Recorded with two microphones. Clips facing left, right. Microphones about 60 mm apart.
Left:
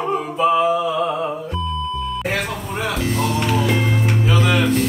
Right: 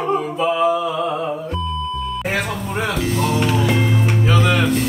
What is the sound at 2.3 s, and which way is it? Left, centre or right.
Music, centre.